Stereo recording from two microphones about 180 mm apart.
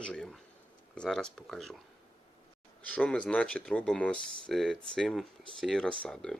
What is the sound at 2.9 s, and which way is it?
Speech, 5° left (ahead or behind).